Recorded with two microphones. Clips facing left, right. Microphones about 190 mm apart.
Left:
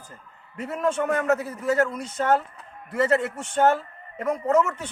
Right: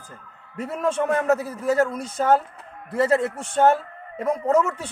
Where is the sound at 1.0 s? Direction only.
35° right (ahead or behind).